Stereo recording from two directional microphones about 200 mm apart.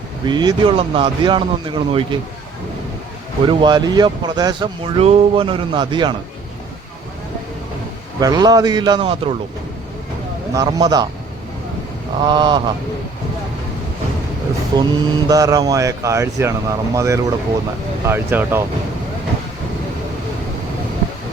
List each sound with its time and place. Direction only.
0.3 s speech: 20° right (ahead or behind)
3.4 s speech: 20° right (ahead or behind)
8.2 s speech: 20° right (ahead or behind)
10.5 s speech: 20° right (ahead or behind)
12.2 s speech: 25° right (ahead or behind)
14.8 s speech: 20° right (ahead or behind)